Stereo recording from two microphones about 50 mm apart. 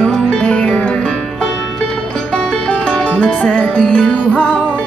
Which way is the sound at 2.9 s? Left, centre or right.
Left.